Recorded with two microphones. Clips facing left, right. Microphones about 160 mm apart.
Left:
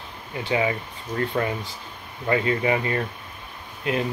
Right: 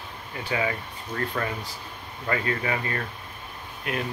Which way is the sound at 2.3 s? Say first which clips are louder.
Left 5 dB; 20° left (ahead or behind).